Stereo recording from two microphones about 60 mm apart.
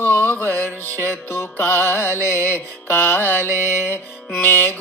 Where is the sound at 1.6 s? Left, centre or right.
Left.